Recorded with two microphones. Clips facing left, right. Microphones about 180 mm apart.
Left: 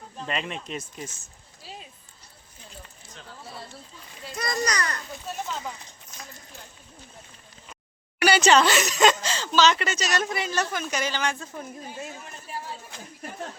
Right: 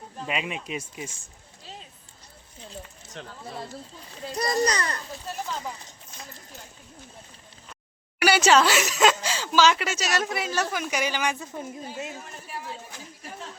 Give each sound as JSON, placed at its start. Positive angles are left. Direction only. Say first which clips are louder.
{"t": 0.2, "sound": "speech", "louder": "right 1 dB", "side_deg": -5}
{"t": 4.3, "sound": "a child's voice", "louder": "right 4 dB", "side_deg": -35}
{"t": 5.3, "sound": "speech", "louder": "even", "side_deg": 0}
{"t": 8.2, "sound": "speech", "louder": "even", "side_deg": -5}